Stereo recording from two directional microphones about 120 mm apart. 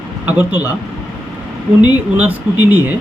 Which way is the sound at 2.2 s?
15° right (ahead or behind).